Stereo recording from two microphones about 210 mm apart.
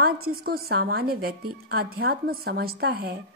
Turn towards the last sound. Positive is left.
turn(degrees=-50)  # may be behind; listen again after turning